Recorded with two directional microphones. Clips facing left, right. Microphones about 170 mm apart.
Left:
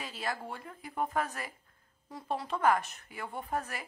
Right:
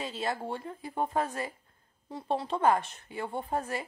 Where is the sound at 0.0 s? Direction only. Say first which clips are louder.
Right 4 dB; 25° right (ahead or behind).